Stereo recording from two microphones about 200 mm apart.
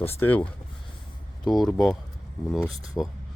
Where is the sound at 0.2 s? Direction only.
10° left (ahead or behind).